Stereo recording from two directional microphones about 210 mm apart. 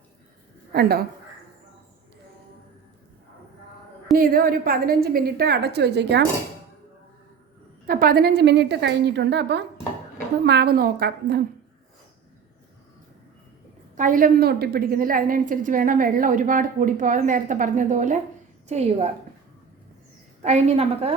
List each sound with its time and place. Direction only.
0.7 s a woman's voice: 50° right (ahead or behind)
4.2 s a woman's voice: 45° right (ahead or behind)
7.9 s a woman's voice: 45° right (ahead or behind)
13.9 s a woman's voice: 40° right (ahead or behind)
20.4 s a woman's voice: 30° right (ahead or behind)